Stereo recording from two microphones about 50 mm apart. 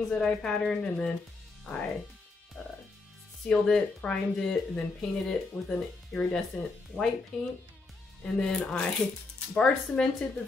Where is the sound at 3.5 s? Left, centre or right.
Centre.